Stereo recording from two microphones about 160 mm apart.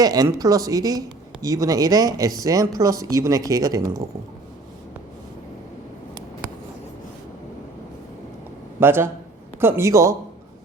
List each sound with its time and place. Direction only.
0.0 s speech: 25° right (ahead or behind)
8.8 s speech: 15° right (ahead or behind)